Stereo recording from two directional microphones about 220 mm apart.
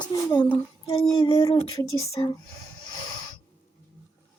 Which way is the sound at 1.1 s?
20° left (ahead or behind).